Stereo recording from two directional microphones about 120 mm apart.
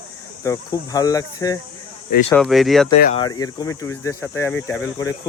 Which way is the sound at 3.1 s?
35° left (ahead or behind).